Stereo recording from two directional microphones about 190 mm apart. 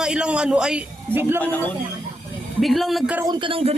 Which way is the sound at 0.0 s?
5° right (ahead or behind).